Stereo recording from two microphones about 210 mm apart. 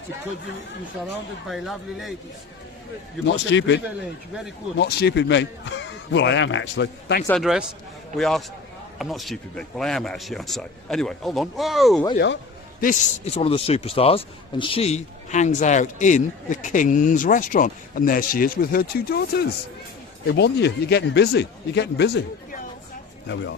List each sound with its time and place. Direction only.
1.5 s speech: centre (ahead or behind)
3.3 s a man's voice: 60° left (ahead or behind)
4.8 s a man's voice: 50° left (ahead or behind)
7.3 s speech: centre (ahead or behind)
12.1 s a man's voice: 60° left (ahead or behind)
12.8 s a man's voice: 35° left (ahead or behind); by 23.6 s 60° left (ahead or behind)